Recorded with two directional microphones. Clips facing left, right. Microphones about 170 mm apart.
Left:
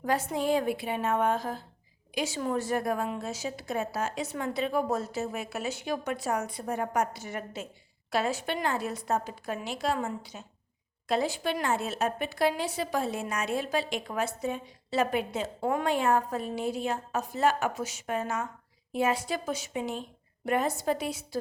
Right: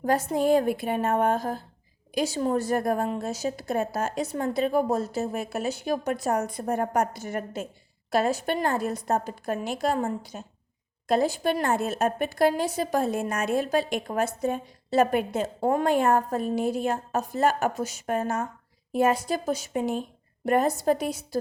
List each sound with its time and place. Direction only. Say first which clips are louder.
0.0 s a woman's voice: right 5 dB; 40° right (ahead or behind)